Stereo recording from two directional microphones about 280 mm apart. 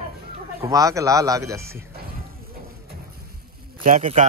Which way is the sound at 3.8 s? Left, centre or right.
Right.